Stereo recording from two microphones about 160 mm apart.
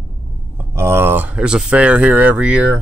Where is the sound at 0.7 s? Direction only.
15° right (ahead or behind).